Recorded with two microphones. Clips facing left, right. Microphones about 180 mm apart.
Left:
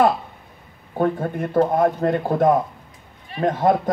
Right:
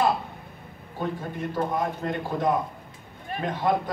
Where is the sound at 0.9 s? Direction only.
55° left (ahead or behind).